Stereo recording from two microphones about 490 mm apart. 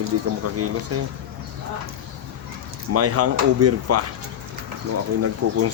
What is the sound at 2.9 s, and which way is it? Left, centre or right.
Speech, right.